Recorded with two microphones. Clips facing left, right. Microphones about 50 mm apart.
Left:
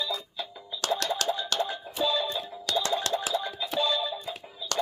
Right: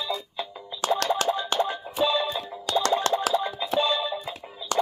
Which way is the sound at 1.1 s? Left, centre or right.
Right.